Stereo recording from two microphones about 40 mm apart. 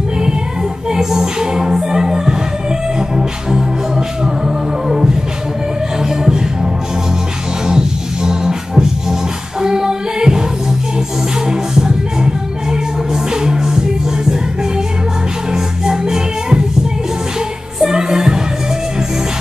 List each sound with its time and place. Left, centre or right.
0.8 s music: centre
4.2 s music: centre
6.0 s music: centre
11.4 s music: centre
15.5 s music: centre
17.8 s music: centre